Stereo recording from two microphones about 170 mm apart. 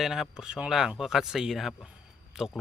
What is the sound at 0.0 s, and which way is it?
Speech, centre (ahead or behind).